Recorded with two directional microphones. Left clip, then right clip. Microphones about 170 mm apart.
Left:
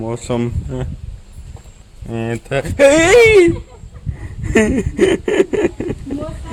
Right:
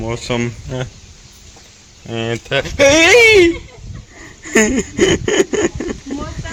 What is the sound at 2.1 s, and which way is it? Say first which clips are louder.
Speech: right 2 dB; 5° left (ahead or behind).